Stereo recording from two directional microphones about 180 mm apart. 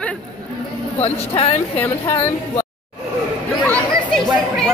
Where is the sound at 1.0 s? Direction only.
35° left (ahead or behind).